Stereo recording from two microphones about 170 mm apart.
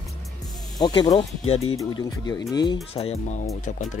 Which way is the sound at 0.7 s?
25° left (ahead or behind).